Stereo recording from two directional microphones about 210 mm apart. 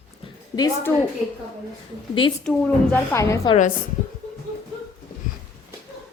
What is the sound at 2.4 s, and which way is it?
A woman's voice, 5° left (ahead or behind).